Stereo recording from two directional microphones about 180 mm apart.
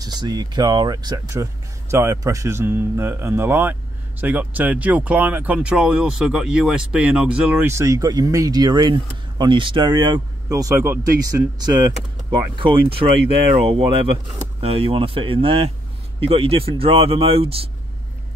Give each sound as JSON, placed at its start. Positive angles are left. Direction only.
{"t": 0.0, "sound": "speech", "side_deg": -20}
{"t": 14.6, "sound": "speech", "side_deg": -30}